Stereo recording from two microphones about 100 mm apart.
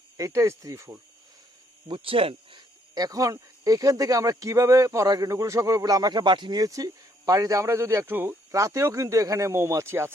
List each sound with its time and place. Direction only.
0.2 s speech: 30° right (ahead or behind)
1.9 s speech: 65° right (ahead or behind)
2.9 s speech: 40° right (ahead or behind)